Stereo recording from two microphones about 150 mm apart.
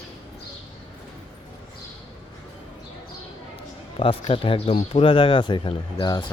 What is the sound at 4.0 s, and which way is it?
Speech, 35° left (ahead or behind).